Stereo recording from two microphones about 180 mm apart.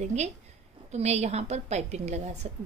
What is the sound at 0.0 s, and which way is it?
Speech, 40° right (ahead or behind).